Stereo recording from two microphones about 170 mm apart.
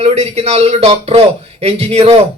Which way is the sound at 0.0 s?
35° right (ahead or behind).